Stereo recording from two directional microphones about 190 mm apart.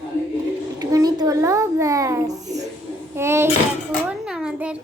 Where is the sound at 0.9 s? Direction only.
20° right (ahead or behind).